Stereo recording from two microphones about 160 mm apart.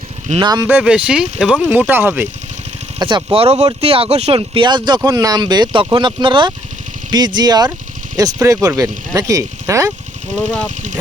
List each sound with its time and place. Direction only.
0.3 s speech: 25° right (ahead or behind)
0.7 s speech: 5° right (ahead or behind)
3.0 s speech: 25° right (ahead or behind)
3.3 s speech: 40° right (ahead or behind); by 9.9 s 20° right (ahead or behind)